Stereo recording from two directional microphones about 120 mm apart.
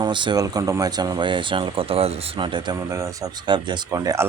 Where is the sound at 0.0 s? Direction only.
40° right (ahead or behind).